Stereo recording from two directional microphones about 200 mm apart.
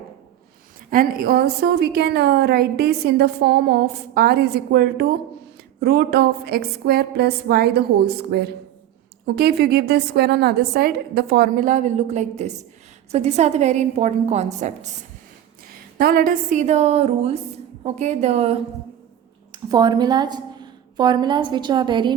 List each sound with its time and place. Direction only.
0.9 s a woman's voice: 45° right (ahead or behind)
15.7 s a woman's voice: 45° right (ahead or behind); by 18.6 s 30° right (ahead or behind)
19.5 s a woman's voice: 20° right (ahead or behind)